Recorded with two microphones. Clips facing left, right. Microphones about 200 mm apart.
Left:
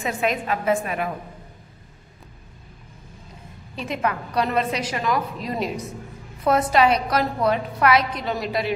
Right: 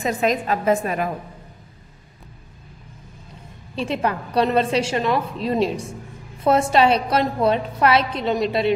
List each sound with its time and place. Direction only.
0.0 s a woman's voice: 40° right (ahead or behind)
3.7 s a woman's voice: 30° right (ahead or behind)